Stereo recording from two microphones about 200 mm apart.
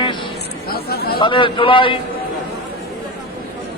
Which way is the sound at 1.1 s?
25° left (ahead or behind).